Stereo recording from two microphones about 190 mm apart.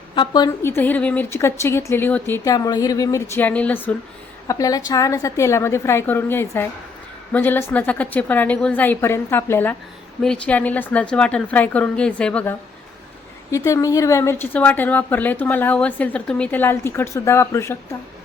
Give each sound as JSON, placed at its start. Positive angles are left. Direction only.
{"t": 0.2, "sound": "a woman's voice", "side_deg": 20}